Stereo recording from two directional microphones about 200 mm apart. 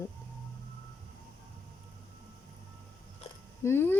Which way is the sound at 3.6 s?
10° left (ahead or behind).